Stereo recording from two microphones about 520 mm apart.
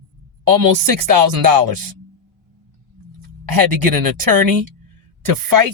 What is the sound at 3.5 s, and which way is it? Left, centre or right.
Speech, right.